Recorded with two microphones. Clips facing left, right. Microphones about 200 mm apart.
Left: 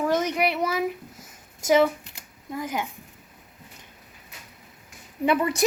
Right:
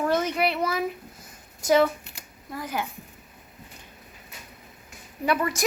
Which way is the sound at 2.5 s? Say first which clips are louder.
Left 2 dB; 15° left (ahead or behind).